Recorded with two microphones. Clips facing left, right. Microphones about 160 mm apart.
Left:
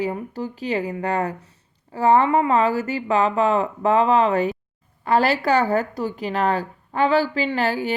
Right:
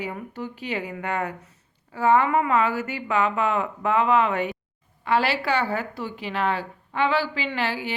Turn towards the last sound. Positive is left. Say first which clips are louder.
# left 5 dB
turn(degrees=45)  # may be behind; listen again after turning